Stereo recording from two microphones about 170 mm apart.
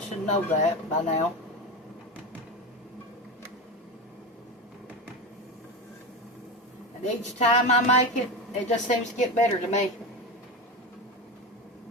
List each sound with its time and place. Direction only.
0.3 s a woman's voice: 45° left (ahead or behind)
7.0 s a woman's voice: 45° left (ahead or behind)